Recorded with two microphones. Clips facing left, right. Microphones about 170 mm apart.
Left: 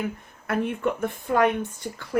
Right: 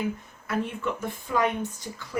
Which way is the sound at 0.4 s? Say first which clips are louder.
Left 4 dB; 55° left (ahead or behind).